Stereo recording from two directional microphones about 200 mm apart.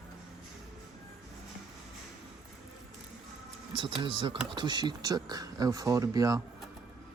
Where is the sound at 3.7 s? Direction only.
25° right (ahead or behind).